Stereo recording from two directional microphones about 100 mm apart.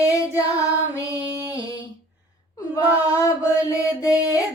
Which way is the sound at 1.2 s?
20° right (ahead or behind).